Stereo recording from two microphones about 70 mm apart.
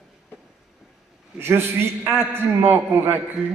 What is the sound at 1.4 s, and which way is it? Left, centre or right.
A man's voice, right.